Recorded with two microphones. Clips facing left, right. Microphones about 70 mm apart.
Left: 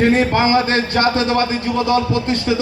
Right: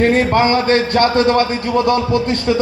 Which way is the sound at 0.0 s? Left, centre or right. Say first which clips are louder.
Right 1 dB; right.